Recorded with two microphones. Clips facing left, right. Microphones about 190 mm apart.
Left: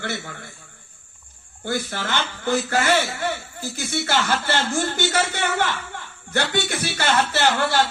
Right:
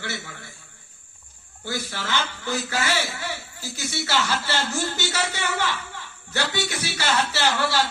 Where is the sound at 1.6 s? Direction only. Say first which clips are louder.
Left 4 dB; 50° left (ahead or behind).